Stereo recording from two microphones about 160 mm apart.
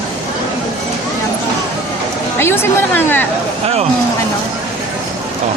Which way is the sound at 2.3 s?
15° left (ahead or behind).